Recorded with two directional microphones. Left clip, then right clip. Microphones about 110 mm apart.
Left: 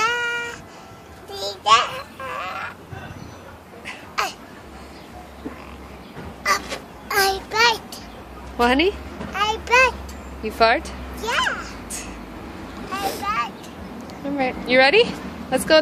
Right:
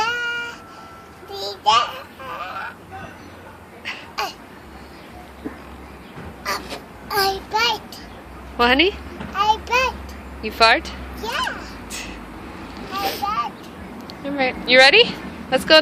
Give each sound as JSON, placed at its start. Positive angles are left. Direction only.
{"t": 0.0, "sound": "music", "side_deg": 20}
{"t": 1.3, "sound": "a sound", "side_deg": 20}
{"t": 3.8, "sound": "a sound", "side_deg": 15}
{"t": 6.4, "sound": "crow", "side_deg": 5}
{"t": 7.1, "sound": "child singing", "side_deg": 20}
{"t": 8.5, "sound": "babbling", "side_deg": 20}
{"t": 10.4, "sound": "a sound", "side_deg": 25}
{"t": 12.9, "sound": "boat", "side_deg": 30}
{"t": 14.1, "sound": "speech", "side_deg": 20}